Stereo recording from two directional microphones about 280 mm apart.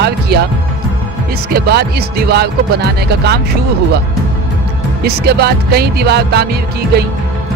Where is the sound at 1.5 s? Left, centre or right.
Right.